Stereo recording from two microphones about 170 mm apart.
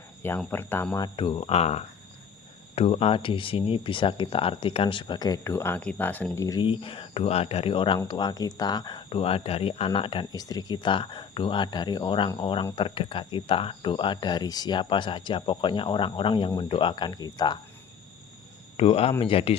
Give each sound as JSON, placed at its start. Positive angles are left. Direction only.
{"t": 0.2, "sound": "speech", "side_deg": 10}
{"t": 6.3, "sound": "speech", "side_deg": 20}
{"t": 18.8, "sound": "speech", "side_deg": 35}